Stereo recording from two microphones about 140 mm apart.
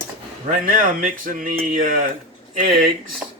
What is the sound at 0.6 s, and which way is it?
Speech, 75° right (ahead or behind).